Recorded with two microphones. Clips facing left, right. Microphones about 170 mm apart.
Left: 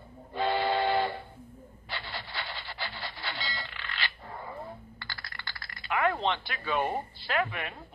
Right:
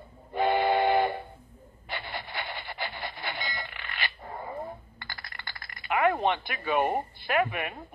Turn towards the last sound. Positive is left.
turn(degrees=-15)  # may be behind; listen again after turning